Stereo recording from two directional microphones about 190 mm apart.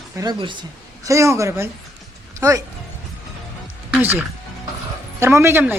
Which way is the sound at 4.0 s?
10° right (ahead or behind).